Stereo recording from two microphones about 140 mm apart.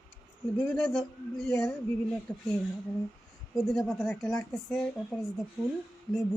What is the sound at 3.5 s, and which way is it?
Speech, centre (ahead or behind).